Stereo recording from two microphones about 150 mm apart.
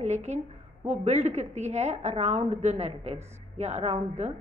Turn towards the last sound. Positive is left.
turn(degrees=-50)  # may be behind; listen again after turning